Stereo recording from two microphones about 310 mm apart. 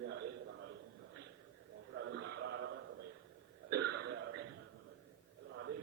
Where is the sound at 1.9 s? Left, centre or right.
Right.